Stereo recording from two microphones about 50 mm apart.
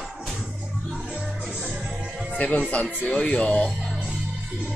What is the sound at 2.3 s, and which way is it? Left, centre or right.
Speech, left.